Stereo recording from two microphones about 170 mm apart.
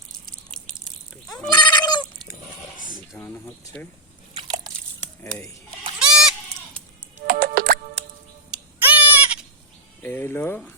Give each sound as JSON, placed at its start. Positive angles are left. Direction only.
{"t": 1.5, "sound": "goat", "side_deg": 25}
{"t": 3.2, "sound": "speech", "side_deg": 15}
{"t": 4.4, "sound": "crunch", "side_deg": -25}
{"t": 6.0, "sound": "goat", "side_deg": -5}
{"t": 7.2, "sound": "music", "side_deg": -60}
{"t": 8.4, "sound": "a sound", "side_deg": -10}
{"t": 10.0, "sound": "speech", "side_deg": 10}